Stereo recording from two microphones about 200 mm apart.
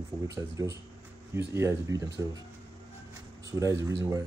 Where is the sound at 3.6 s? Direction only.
15° right (ahead or behind).